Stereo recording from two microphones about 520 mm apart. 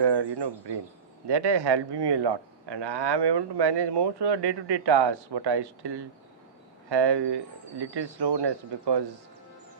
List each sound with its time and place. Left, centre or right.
0.0 s speech: right